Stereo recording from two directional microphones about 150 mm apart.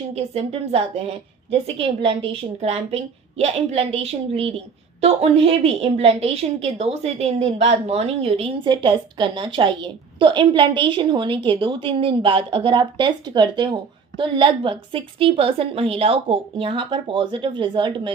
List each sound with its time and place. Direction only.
0.1 s a woman's voice: 45° right (ahead or behind)